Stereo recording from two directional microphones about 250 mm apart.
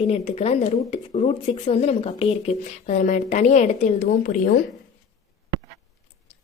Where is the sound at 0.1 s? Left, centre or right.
Left.